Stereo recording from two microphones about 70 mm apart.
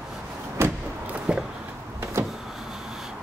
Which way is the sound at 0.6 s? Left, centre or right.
Right.